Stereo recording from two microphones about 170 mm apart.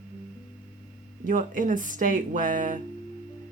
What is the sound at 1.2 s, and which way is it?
Speech, 50° right (ahead or behind).